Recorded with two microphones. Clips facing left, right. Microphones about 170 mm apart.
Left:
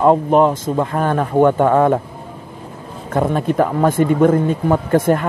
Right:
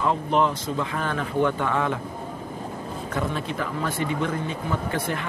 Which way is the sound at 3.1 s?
50° left (ahead or behind).